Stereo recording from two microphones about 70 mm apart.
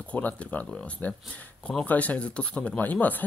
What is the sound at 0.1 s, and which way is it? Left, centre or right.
Speech, left.